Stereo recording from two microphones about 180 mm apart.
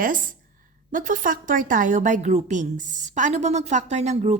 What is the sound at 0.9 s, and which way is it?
A woman's voice, 45° right (ahead or behind).